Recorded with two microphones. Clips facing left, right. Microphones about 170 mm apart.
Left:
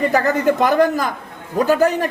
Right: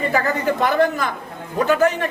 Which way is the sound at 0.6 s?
40° left (ahead or behind).